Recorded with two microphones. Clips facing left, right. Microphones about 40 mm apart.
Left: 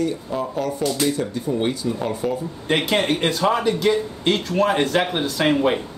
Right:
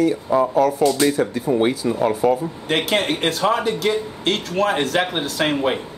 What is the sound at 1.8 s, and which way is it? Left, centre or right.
Speech, right.